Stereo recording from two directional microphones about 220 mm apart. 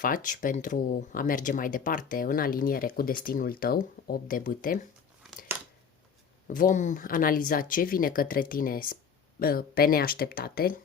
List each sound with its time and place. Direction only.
0.0 s speech: 35° left (ahead or behind)
6.5 s speech: 35° left (ahead or behind)